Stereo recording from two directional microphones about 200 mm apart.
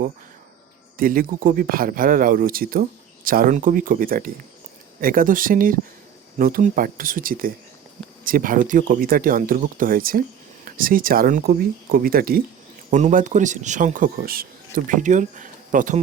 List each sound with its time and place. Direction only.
0.9 s speech: 45° right (ahead or behind)